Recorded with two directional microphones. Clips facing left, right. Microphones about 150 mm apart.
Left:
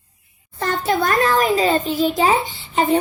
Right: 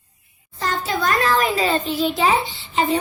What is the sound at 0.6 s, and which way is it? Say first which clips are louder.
A child's voice: left 4 dB; 55° left (ahead or behind).